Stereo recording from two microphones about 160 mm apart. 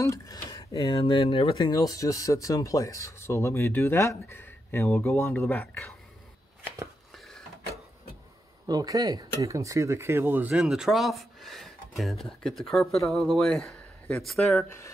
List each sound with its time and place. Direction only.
0.0 s speech: 20° left (ahead or behind); by 1.6 s 35° left (ahead or behind)
1.6 s speech: 25° left (ahead or behind)
5.6 s speech: 5° left (ahead or behind)
8.6 s speech: 25° right (ahead or behind); by 14.7 s centre (ahead or behind)